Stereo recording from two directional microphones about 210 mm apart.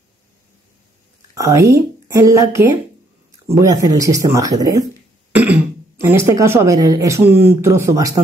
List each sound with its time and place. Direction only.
1.3 s speech: 15° right (ahead or behind)